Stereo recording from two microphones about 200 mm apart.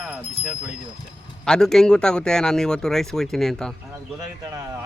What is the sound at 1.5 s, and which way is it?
Speech, 5° left (ahead or behind).